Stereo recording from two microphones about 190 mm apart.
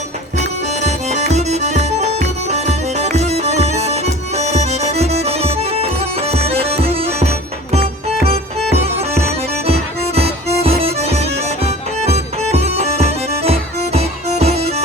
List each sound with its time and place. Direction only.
0.3 s music: 35° right (ahead or behind)